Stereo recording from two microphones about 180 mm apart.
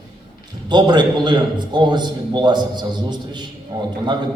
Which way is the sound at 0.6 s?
25° right (ahead or behind).